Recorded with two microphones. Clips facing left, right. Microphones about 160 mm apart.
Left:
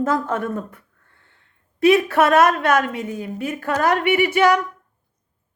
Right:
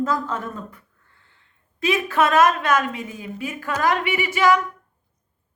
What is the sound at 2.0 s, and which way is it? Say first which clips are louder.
A woman's voice: left 2 dB; 65° left (ahead or behind).